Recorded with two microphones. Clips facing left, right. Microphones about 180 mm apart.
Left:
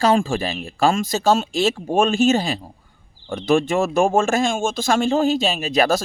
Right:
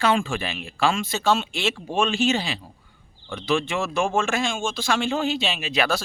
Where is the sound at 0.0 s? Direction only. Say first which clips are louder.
Left 5 dB; 40° left (ahead or behind).